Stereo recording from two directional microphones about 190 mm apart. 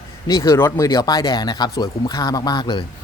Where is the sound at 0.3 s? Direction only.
20° left (ahead or behind).